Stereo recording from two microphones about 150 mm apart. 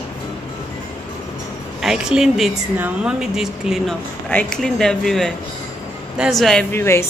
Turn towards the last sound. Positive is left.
turn(degrees=15)  # may be behind; listen again after turning